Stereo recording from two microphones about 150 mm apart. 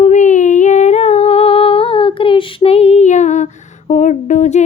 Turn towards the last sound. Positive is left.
turn(degrees=50)  # may be behind; listen again after turning